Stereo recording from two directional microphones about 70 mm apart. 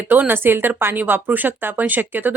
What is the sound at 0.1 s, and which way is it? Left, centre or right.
Speech, right.